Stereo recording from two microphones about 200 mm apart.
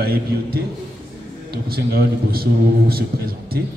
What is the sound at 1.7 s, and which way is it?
A man's voice, 50° right (ahead or behind).